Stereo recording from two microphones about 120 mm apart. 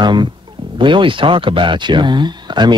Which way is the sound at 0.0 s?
40° right (ahead or behind).